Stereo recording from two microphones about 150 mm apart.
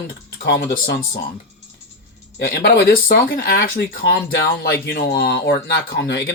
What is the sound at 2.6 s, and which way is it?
Speech, 90° left.